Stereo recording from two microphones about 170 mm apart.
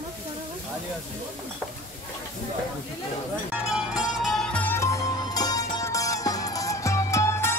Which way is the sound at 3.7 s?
5° right (ahead or behind).